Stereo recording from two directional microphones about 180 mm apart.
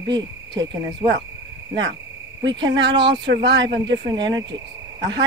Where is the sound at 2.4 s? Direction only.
25° right (ahead or behind).